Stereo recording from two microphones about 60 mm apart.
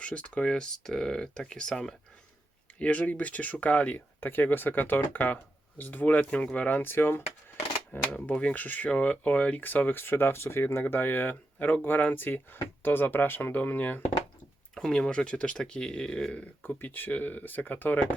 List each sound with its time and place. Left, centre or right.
0.0 s speech: centre
2.7 s speech: left
8.3 s speech: left
14.8 s speech: centre; by 18.1 s left